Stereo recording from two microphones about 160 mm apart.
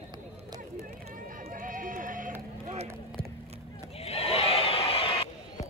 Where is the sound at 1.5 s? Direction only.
60° right (ahead or behind).